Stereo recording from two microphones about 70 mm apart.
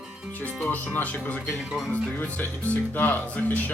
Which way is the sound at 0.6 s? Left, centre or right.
Left.